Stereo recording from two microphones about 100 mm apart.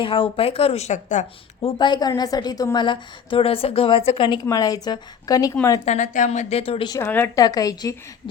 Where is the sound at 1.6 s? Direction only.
50° left (ahead or behind).